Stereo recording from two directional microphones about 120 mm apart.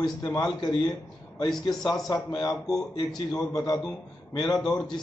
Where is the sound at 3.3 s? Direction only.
30° left (ahead or behind).